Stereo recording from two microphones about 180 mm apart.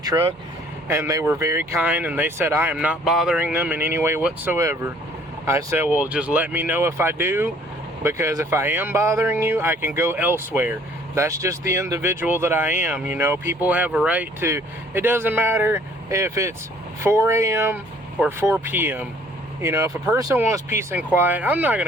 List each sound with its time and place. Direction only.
0.0 s speech: 20° right (ahead or behind)